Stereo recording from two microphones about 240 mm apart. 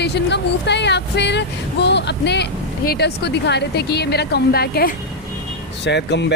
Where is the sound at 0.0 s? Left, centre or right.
Left.